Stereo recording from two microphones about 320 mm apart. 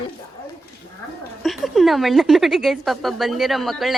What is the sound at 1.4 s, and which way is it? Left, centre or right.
A woman's voice, centre.